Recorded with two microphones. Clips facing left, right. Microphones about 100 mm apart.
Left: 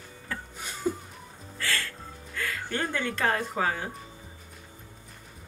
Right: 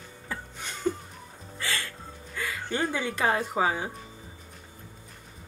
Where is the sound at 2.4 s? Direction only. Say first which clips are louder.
Right 1 dB; 15° right (ahead or behind).